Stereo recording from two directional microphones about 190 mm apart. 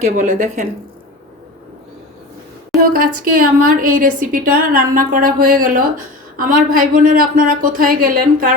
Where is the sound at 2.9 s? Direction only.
45° right (ahead or behind).